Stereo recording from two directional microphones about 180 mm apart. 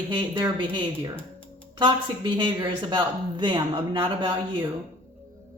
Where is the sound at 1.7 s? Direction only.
25° right (ahead or behind).